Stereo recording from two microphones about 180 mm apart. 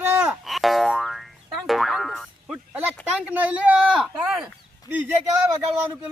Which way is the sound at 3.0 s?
10° right (ahead or behind).